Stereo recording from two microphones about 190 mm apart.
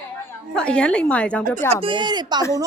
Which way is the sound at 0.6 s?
5° left (ahead or behind).